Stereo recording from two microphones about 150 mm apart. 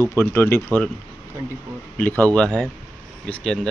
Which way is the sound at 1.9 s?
10° left (ahead or behind).